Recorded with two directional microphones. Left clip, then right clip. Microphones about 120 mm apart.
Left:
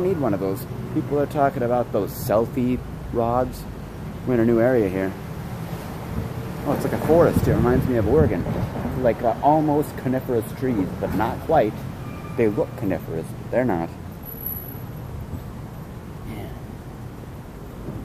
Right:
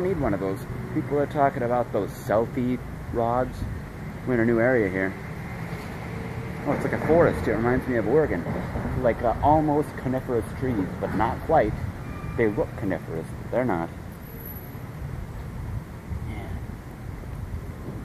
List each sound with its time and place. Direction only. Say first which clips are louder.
0.2 s speech: left 3 dB; 20° left (ahead or behind)
6.6 s speech: left 2 dB; 10° left (ahead or behind)
8.5 s speech: left 3 dB; 5° right (ahead or behind); by 13.8 s 15° left (ahead or behind)